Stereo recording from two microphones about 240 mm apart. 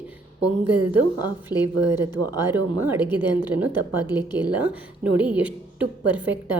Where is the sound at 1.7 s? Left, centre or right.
Right.